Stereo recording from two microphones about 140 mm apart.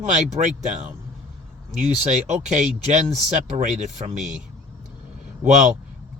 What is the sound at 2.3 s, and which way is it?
Speech, 55° right (ahead or behind).